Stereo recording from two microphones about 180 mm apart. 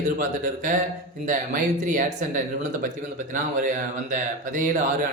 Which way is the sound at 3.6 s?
45° right (ahead or behind).